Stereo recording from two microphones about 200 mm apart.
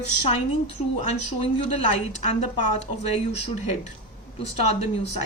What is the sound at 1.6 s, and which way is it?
Speech, 30° left (ahead or behind).